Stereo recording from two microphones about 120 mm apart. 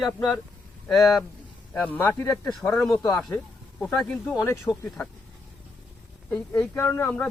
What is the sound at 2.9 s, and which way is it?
Speech, 25° left (ahead or behind).